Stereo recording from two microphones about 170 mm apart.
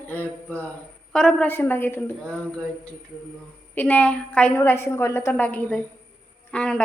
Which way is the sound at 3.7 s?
10° left (ahead or behind).